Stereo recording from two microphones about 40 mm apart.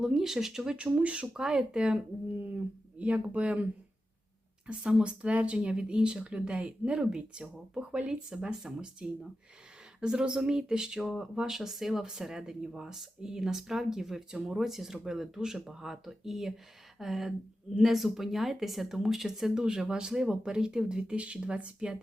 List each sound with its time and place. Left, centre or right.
0.0 s speech: centre
0.8 s speech: right
1.4 s speech: centre
3.0 s speech: right; by 11.0 s centre
11.0 s speech: centre
19.6 s speech: right